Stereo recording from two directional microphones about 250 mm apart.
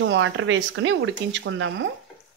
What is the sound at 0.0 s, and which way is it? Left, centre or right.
Speech, right.